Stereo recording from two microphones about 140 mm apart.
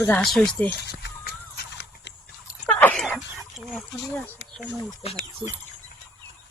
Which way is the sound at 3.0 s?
5° right (ahead or behind).